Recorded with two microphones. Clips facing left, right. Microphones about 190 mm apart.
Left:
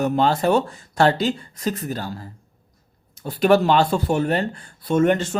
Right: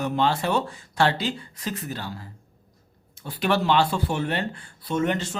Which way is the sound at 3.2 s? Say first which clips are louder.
Left 7 dB; 45° left (ahead or behind).